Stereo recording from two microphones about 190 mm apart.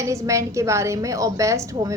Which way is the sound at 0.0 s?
15° right (ahead or behind).